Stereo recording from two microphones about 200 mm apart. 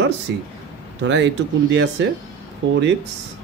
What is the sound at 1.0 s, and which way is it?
Speech, 65° right (ahead or behind).